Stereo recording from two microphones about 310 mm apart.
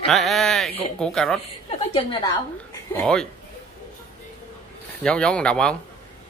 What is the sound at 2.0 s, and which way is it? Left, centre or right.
Speech, centre.